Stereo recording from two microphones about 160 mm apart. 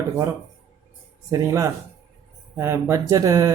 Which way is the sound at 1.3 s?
20° right (ahead or behind).